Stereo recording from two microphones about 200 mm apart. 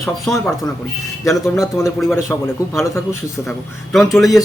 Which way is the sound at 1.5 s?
15° left (ahead or behind).